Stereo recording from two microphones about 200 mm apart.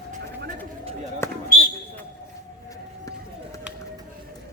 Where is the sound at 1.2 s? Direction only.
15° left (ahead or behind).